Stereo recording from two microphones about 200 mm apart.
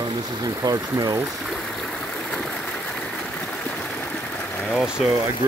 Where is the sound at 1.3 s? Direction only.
Centre (ahead or behind).